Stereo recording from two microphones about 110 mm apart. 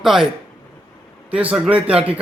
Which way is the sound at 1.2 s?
10° right (ahead or behind).